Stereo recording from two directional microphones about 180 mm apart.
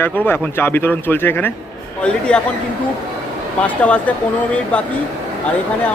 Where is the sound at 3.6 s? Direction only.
5° left (ahead or behind).